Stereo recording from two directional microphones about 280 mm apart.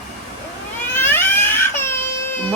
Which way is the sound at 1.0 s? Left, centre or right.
Centre.